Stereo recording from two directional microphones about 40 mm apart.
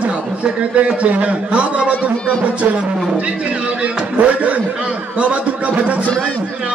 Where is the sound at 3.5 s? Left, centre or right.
Right.